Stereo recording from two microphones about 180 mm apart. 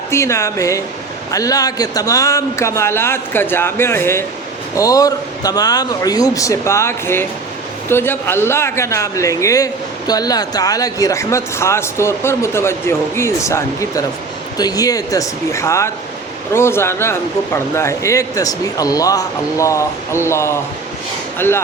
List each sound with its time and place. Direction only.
0.1 s a man's voice: 15° left (ahead or behind)